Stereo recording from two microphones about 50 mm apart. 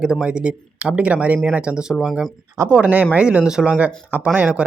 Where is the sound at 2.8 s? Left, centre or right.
Right.